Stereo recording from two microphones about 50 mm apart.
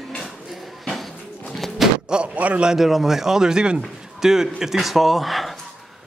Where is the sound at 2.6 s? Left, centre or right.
Centre.